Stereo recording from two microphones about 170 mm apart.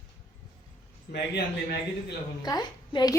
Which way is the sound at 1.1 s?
75° left (ahead or behind).